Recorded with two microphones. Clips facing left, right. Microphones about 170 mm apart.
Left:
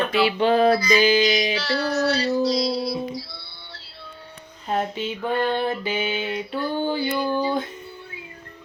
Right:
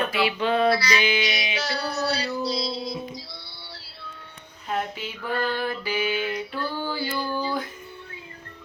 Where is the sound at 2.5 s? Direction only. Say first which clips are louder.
Left 6 dB; 20° right (ahead or behind).